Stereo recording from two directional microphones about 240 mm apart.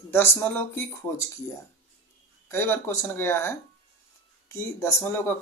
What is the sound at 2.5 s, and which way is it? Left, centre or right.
Speech, centre.